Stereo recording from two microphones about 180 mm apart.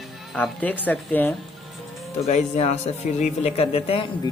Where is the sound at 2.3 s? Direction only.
40° left (ahead or behind).